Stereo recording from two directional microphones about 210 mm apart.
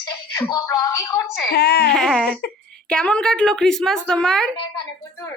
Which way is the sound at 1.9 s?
5° left (ahead or behind).